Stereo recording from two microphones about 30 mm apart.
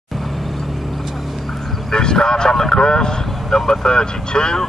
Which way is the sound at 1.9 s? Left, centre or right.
Left.